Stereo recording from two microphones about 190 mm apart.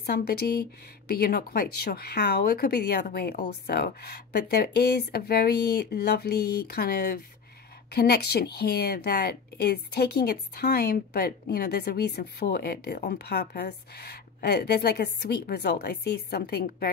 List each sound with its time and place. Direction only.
0.0 s a woman's voice: 55° left (ahead or behind)